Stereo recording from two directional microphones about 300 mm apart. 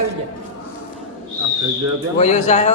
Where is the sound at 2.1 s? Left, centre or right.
Left.